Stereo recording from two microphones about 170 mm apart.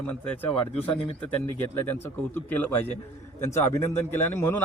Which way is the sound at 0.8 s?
10° left (ahead or behind).